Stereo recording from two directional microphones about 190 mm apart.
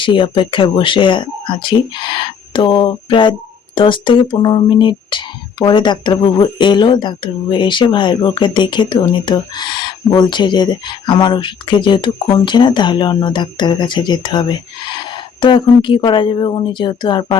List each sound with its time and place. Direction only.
0.0 s speech: 25° left (ahead or behind)